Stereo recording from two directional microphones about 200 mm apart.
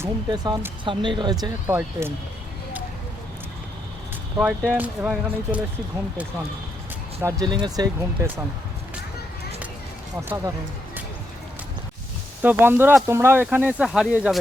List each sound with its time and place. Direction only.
0.0 s speech: 20° right (ahead or behind)
4.7 s speech: 5° right (ahead or behind)
7.2 s speech: 15° right (ahead or behind)
10.2 s speech: 15° right (ahead or behind)
12.4 s speech: 10° right (ahead or behind)